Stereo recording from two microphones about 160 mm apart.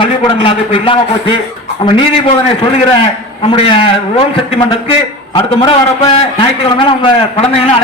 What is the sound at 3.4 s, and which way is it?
A man's voice, 35° left (ahead or behind).